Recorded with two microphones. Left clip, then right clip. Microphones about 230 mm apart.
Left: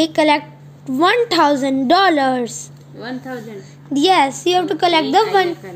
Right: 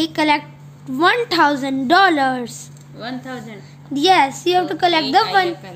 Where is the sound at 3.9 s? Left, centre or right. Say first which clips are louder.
Even; centre.